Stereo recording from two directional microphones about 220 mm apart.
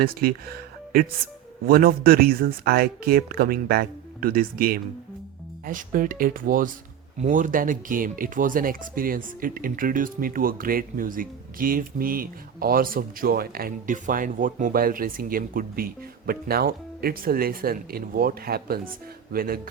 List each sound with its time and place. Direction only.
0.0 s speech: 40° right (ahead or behind)